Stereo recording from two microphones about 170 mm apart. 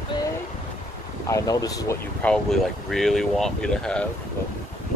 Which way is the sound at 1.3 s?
20° left (ahead or behind).